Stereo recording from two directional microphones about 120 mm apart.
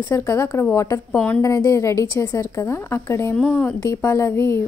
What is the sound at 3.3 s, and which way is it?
Speech, 10° left (ahead or behind).